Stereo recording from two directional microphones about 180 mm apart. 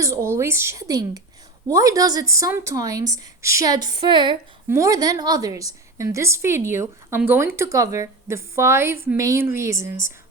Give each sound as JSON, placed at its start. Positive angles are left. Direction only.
{"t": 0.0, "sound": "a woman's voice", "side_deg": -15}